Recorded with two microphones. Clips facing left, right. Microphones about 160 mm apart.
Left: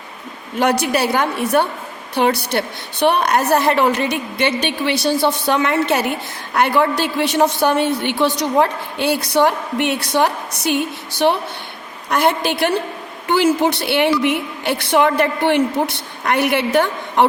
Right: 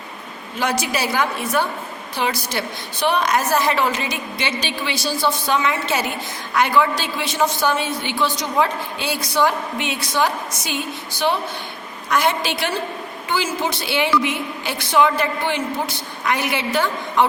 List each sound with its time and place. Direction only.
0.6 s a woman's voice: 60° left (ahead or behind)